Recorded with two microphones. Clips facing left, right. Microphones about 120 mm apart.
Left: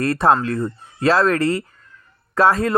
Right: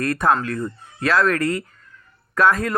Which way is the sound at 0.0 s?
30° left (ahead or behind).